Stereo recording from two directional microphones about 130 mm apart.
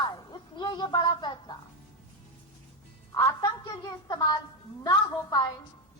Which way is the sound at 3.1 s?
30° left (ahead or behind).